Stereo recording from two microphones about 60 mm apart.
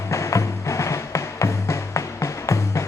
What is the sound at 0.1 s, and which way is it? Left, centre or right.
Music, left.